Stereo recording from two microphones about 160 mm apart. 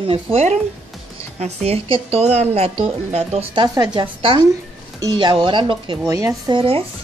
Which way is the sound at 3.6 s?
25° right (ahead or behind).